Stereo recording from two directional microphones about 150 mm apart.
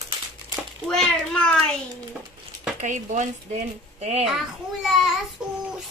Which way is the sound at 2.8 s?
55° right (ahead or behind).